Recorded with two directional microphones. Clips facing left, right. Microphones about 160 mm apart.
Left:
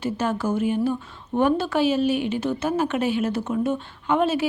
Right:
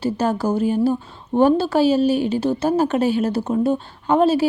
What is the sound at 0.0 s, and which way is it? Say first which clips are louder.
A woman's voice: right 4 dB; 35° right (ahead or behind).